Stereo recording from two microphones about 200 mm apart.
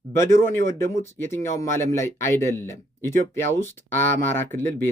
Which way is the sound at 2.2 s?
15° left (ahead or behind).